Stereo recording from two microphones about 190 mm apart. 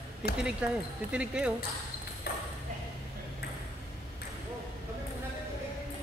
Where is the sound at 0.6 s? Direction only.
5° right (ahead or behind).